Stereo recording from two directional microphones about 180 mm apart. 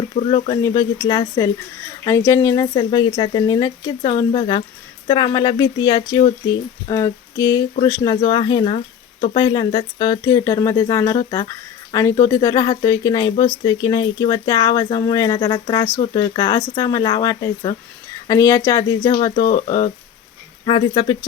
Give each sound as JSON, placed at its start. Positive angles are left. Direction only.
{"t": 0.2, "sound": "speech", "side_deg": 30}
{"t": 19.5, "sound": "speech", "side_deg": 45}
{"t": 20.7, "sound": "speech", "side_deg": 25}